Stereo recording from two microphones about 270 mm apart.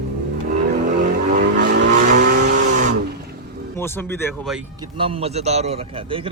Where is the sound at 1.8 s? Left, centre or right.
Right.